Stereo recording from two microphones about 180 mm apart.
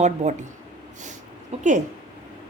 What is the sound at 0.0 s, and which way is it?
Speech, 40° right (ahead or behind).